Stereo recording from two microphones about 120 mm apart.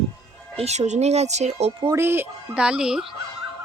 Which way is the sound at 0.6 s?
65° right (ahead or behind).